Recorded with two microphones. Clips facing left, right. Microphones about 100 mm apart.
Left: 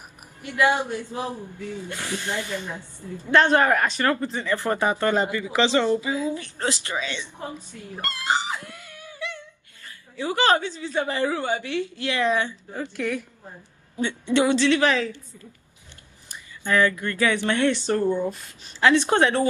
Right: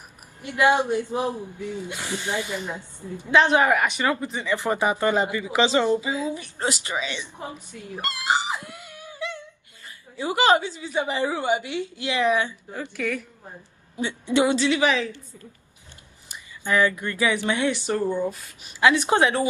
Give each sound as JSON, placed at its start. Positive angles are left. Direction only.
{"t": 0.4, "sound": "speech", "side_deg": -20}
{"t": 3.3, "sound": "speech", "side_deg": -10}
{"t": 13.0, "sound": "a woman's voice", "side_deg": 0}
{"t": 13.9, "sound": "speech", "side_deg": -15}
{"t": 16.3, "sound": "speech", "side_deg": -15}